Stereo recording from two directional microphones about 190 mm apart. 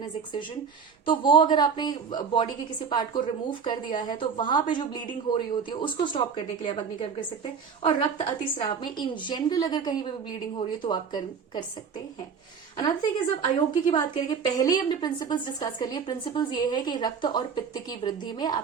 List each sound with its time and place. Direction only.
1.0 s speech: 25° left (ahead or behind)
12.7 s speech: 25° left (ahead or behind)